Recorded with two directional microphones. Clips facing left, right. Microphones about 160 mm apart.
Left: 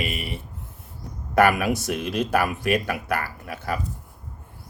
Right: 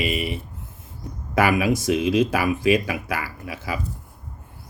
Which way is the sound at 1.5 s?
90° right.